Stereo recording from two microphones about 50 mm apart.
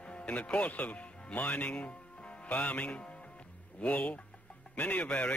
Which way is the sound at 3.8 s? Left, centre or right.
Left.